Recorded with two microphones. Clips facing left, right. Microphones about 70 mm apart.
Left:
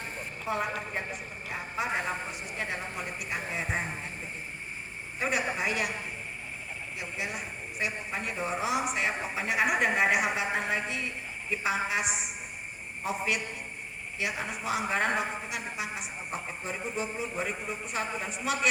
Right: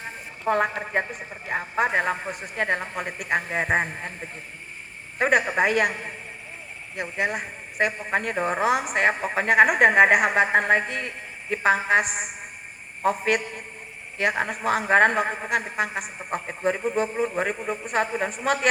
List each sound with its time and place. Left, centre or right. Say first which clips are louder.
0.4 s a man's voice: right 9 dB; right
5.2 s a man's voice: right 9 dB; right